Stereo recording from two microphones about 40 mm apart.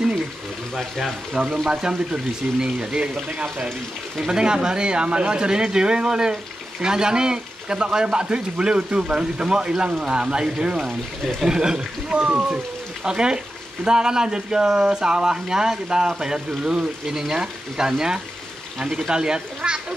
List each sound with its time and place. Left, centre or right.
0.7 s speech: centre
1.7 s a man's voice: centre